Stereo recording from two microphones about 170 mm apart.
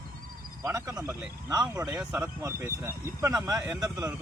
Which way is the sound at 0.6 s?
20° right (ahead or behind).